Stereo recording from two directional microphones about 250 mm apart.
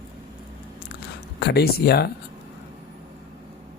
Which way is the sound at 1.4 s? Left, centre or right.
Left.